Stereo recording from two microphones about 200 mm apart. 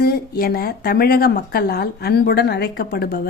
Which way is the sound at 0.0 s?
50° left (ahead or behind).